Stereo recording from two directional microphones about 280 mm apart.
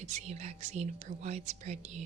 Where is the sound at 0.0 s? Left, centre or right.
Right.